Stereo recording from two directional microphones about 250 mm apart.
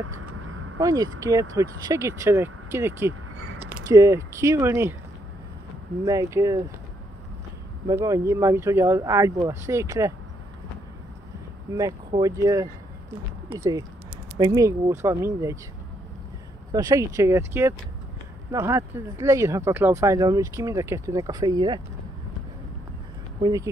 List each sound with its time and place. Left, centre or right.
0.0 s a sound: right
0.7 s speech: centre
6.0 s speech: centre
7.9 s speech: centre
11.7 s speech: centre
16.7 s speech: centre
23.4 s speech: centre